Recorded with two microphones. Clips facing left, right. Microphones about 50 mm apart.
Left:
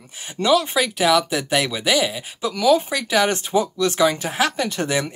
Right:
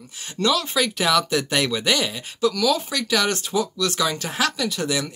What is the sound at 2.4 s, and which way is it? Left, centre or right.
Speech, left.